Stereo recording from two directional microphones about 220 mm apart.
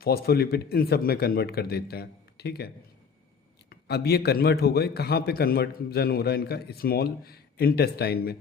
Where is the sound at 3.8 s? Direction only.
45° left (ahead or behind).